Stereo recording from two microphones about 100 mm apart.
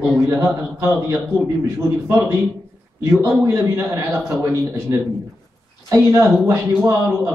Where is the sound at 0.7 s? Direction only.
25° right (ahead or behind).